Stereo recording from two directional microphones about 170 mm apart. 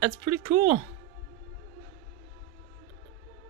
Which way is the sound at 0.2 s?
35° right (ahead or behind).